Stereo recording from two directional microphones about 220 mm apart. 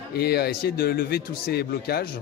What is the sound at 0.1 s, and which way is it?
Speech, 45° left (ahead or behind).